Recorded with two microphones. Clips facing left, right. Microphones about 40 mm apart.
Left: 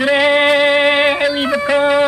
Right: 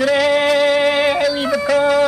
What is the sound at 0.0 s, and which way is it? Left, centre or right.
Music, left.